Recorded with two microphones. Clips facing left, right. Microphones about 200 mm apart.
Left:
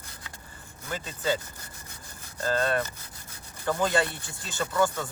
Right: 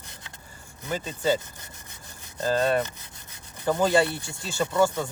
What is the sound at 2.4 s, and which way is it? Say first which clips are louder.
Speech: right 3 dB; 15° right (ahead or behind).